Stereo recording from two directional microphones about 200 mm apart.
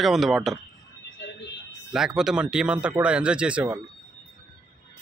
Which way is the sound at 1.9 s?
5° right (ahead or behind).